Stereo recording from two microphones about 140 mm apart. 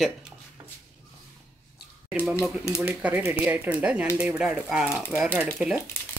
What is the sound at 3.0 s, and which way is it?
Speech, 10° right (ahead or behind).